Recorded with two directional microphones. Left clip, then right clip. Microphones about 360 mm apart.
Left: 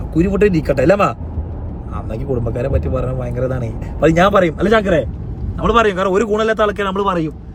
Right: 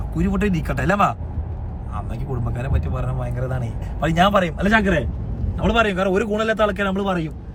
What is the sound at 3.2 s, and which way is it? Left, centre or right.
Speech, right.